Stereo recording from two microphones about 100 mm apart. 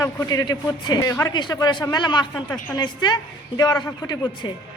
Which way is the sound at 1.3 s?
45° left (ahead or behind).